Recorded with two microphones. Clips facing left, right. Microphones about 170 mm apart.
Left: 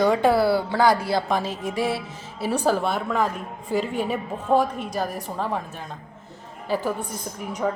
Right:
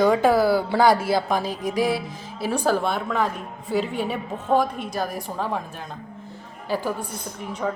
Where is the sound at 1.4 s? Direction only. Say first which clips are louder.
Right 1 dB; 25° left (ahead or behind).